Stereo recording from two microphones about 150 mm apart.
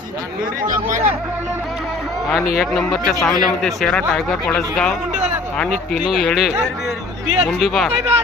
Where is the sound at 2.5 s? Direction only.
Centre (ahead or behind).